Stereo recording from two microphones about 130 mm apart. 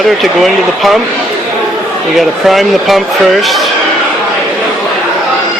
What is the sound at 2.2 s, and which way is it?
Speech, centre (ahead or behind).